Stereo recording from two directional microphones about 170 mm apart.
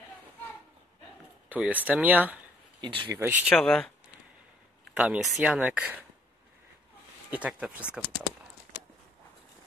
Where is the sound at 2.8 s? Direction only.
25° right (ahead or behind).